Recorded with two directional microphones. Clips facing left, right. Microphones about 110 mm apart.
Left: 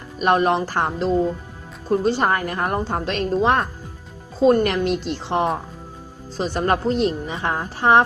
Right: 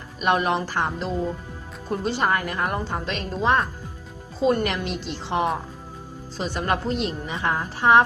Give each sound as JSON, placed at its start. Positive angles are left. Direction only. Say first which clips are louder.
{"t": 0.2, "sound": "a woman's voice", "louder": "left 4 dB", "side_deg": 40}